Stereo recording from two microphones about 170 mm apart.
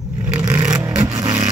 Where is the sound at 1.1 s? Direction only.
25° right (ahead or behind).